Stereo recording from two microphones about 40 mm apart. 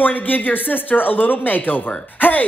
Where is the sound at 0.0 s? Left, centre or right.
Left.